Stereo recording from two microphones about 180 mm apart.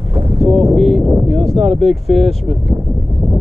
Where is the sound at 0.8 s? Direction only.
Centre (ahead or behind).